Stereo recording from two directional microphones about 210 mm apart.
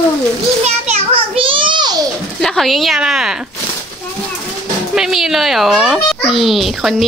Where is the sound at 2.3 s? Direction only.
Centre (ahead or behind).